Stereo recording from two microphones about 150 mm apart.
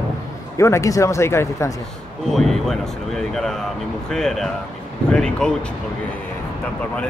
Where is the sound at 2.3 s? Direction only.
Centre (ahead or behind).